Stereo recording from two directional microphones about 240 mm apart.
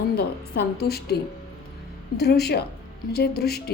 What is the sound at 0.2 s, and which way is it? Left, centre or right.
A woman's voice, left.